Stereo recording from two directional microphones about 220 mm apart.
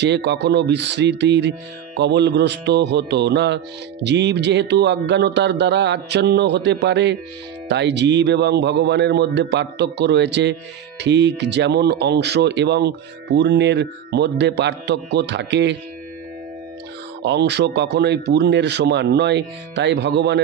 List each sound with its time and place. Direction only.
0.0 s music: 50° right (ahead or behind)
17.2 s music: 50° right (ahead or behind)